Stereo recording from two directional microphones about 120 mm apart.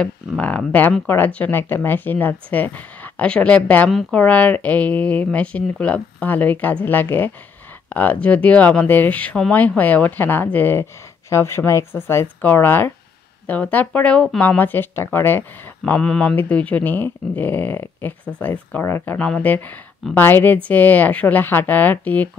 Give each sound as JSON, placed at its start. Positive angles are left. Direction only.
{"t": 0.4, "sound": "speech", "side_deg": 10}